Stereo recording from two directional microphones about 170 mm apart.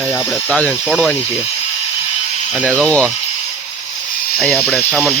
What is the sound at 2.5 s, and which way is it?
Speech, 5° left (ahead or behind).